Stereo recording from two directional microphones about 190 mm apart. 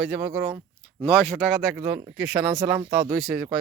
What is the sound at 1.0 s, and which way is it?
Speech, 10° left (ahead or behind).